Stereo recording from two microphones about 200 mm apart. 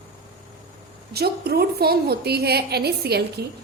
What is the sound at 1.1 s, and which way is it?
A woman's voice, 50° right (ahead or behind).